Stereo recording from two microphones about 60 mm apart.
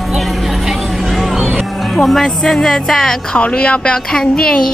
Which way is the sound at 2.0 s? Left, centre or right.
Centre.